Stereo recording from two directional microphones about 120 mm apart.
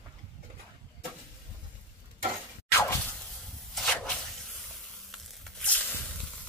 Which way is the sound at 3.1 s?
5° left (ahead or behind).